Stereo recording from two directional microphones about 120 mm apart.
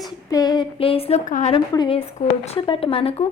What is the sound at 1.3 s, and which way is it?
Speech, 90° left.